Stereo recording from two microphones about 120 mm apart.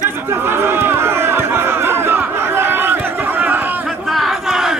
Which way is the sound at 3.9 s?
Centre (ahead or behind).